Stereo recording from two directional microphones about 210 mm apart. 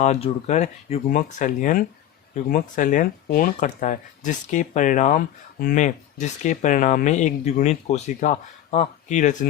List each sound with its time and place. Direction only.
0.0 s speech: 30° left (ahead or behind)